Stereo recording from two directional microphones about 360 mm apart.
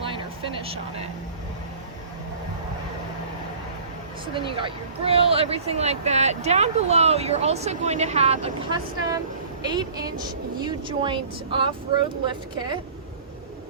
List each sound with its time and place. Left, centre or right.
0.0 s vehicle: centre
4.4 s speech: centre